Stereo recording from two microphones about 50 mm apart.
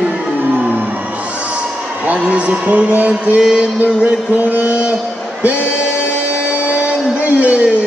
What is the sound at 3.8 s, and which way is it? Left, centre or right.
Music, right.